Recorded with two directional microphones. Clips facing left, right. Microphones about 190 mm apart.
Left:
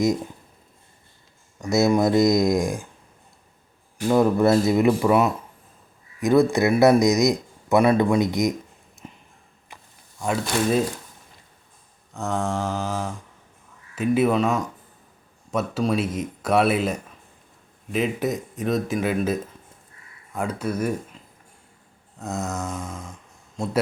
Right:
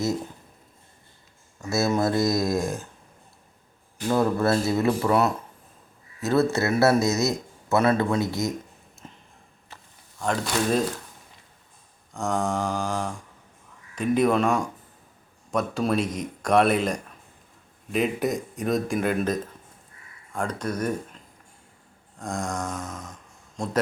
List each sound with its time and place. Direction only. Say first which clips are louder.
1.6 s speech: left 4 dB; 20° left (ahead or behind)
4.1 s speech: left 4 dB; 15° left (ahead or behind)
10.2 s speech: left 2 dB; 5° left (ahead or behind)
12.1 s speech: even; centre (ahead or behind)
22.2 s speech: left 1 dB; 5° left (ahead or behind)